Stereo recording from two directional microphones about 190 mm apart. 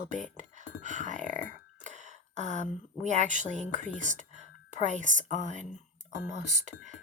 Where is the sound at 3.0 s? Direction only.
40° right (ahead or behind).